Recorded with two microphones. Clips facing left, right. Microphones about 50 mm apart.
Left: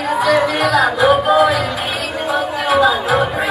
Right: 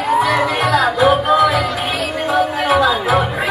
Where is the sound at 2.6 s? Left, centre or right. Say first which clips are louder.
Even; right.